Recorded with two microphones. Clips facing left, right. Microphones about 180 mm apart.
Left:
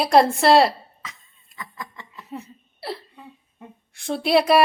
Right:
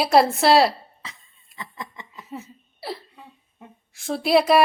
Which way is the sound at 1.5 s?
25° right (ahead or behind).